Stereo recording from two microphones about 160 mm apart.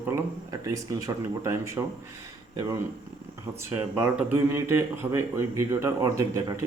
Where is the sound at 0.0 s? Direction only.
15° right (ahead or behind).